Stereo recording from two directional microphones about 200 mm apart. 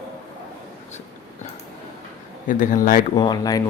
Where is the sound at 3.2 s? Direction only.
20° left (ahead or behind).